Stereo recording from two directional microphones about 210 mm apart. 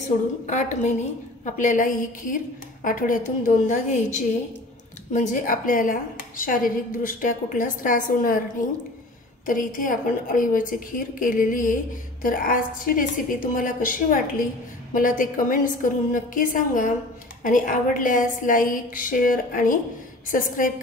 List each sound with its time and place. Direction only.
0.5 s a woman's voice: 35° left (ahead or behind)
9.5 s a woman's voice: 40° left (ahead or behind)